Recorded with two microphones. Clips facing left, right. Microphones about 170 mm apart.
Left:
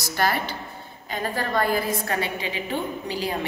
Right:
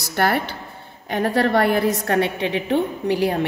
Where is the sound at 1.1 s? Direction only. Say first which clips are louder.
Right 8 dB; 70° right (ahead or behind).